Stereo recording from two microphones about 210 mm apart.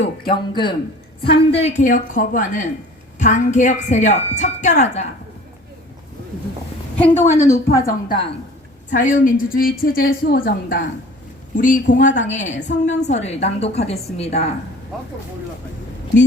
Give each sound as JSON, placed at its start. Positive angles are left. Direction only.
{"t": 0.0, "sound": "speech", "side_deg": 25}
{"t": 1.6, "sound": "a woman's voice", "side_deg": 35}
{"t": 7.2, "sound": "a woman's voice", "side_deg": 10}
{"t": 8.9, "sound": "a woman's voice", "side_deg": 40}
{"t": 14.9, "sound": "speech", "side_deg": 0}